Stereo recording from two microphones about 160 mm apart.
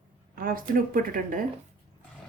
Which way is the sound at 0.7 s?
60° right (ahead or behind).